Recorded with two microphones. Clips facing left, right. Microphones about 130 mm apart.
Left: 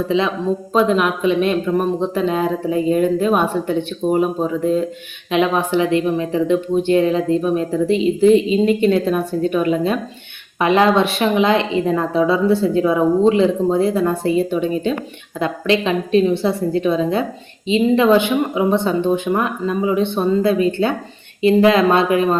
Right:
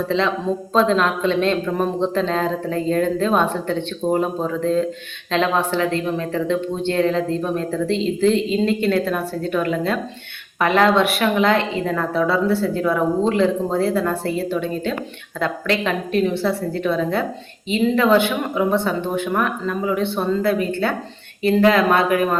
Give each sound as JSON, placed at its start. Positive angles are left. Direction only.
{"t": 0.1, "sound": "speech", "side_deg": 10}